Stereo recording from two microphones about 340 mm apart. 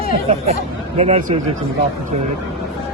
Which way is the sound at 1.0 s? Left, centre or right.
Centre.